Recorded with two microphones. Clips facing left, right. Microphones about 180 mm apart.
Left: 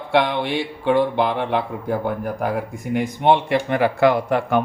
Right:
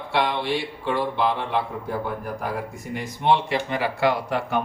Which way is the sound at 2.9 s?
55° left (ahead or behind).